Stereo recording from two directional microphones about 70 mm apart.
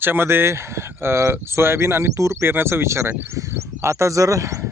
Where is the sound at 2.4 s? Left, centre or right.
Right.